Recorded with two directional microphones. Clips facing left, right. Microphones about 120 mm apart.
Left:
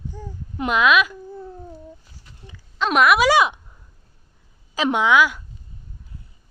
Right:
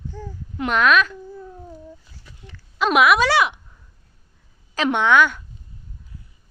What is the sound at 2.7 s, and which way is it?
Speech, 5° right (ahead or behind).